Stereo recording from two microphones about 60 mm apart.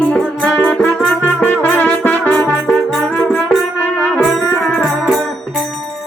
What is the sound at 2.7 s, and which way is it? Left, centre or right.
Music, centre.